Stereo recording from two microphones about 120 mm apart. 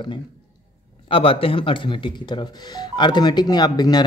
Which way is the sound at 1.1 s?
50° left (ahead or behind).